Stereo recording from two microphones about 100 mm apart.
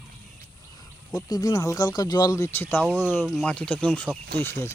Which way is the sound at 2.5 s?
20° left (ahead or behind).